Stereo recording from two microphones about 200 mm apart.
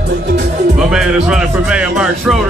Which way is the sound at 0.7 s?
5° right (ahead or behind).